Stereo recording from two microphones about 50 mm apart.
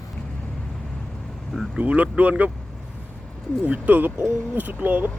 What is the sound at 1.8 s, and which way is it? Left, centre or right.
Speech, right.